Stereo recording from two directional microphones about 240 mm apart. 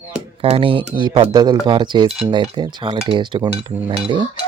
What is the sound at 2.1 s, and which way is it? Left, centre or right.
Speech, centre.